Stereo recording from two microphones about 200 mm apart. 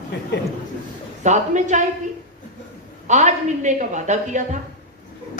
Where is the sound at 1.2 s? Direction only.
35° right (ahead or behind).